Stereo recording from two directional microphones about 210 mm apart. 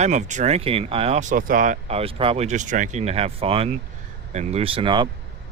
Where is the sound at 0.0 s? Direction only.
35° right (ahead or behind).